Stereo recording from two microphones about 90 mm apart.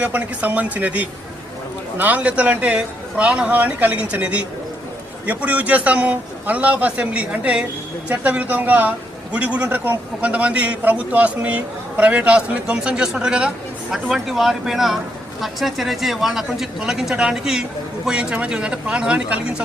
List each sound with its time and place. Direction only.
0.0 s speech: 15° right (ahead or behind)